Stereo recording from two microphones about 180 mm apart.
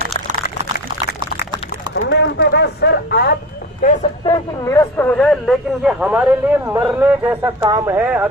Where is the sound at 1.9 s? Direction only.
80° left; by 3.3 s 65° left (ahead or behind).